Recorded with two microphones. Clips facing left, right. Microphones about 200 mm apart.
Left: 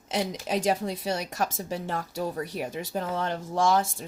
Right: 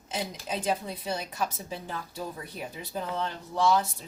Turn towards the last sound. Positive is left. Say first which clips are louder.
# left 1 dB
turn(degrees=45)  # may be behind; listen again after turning